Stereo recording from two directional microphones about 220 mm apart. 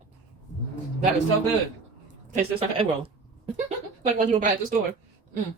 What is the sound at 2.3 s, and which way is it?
Speech, 25° right (ahead or behind).